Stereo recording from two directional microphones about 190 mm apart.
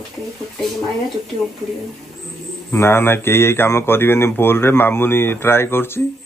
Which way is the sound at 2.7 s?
10° left (ahead or behind).